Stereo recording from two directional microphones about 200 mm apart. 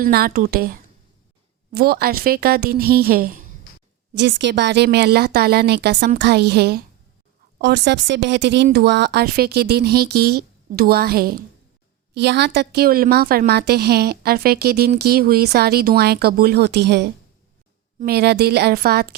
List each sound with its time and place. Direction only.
0.0 s a woman's voice: 50° right (ahead or behind)
4.1 s a woman's voice: 60° right (ahead or behind)